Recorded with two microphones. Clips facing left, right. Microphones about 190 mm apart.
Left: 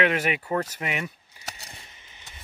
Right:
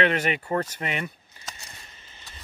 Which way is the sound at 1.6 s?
15° left (ahead or behind).